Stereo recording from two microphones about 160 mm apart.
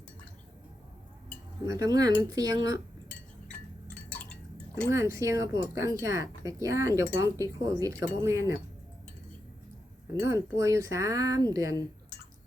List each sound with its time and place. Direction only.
1.7 s speech: 25° right (ahead or behind)
4.1 s a sound: 5° left (ahead or behind)
4.9 s speech: 20° right (ahead or behind)
10.2 s speech: 20° right (ahead or behind)